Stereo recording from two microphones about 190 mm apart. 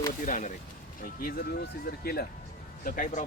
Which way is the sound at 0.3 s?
45° left (ahead or behind).